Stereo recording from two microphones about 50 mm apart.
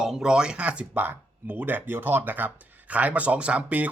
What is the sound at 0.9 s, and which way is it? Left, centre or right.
Speech, right.